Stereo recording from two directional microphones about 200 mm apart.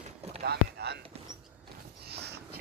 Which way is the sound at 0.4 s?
55° right (ahead or behind).